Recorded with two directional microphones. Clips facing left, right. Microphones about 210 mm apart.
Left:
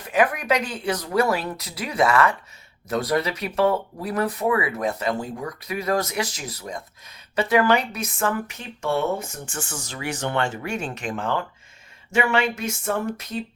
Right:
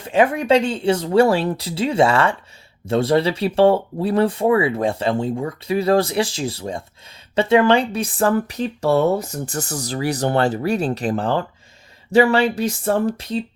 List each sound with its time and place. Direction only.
0.0 s speech: 25° right (ahead or behind)